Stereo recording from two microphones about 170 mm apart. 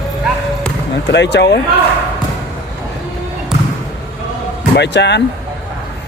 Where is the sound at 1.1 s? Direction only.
85° left.